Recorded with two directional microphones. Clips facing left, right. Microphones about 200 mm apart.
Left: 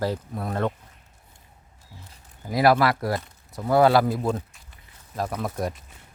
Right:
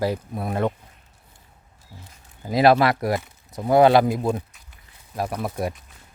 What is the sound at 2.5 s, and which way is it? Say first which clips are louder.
Speech: right 3 dB; 25° right (ahead or behind).